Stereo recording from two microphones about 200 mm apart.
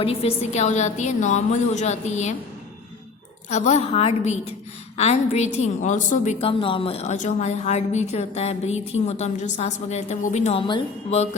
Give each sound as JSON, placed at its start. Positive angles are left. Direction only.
{"t": 0.0, "sound": "a woman's voice", "side_deg": 30}
{"t": 3.5, "sound": "a woman's voice", "side_deg": 35}